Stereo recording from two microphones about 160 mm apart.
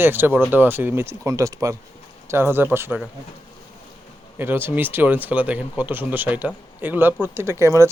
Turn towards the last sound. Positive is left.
turn(degrees=-20)  # may be behind; listen again after turning